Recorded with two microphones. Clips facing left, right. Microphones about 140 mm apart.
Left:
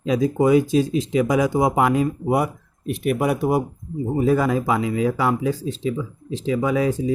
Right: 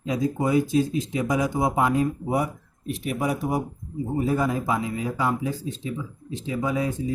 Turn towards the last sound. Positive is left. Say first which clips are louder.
# left 6 dB
turn(degrees=90)